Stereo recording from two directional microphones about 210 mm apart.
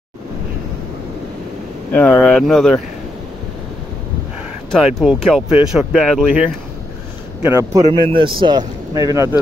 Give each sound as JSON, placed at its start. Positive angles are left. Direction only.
{"t": 1.9, "sound": "speech", "side_deg": 5}
{"t": 4.6, "sound": "speech", "side_deg": 0}
{"t": 7.4, "sound": "speech", "side_deg": -15}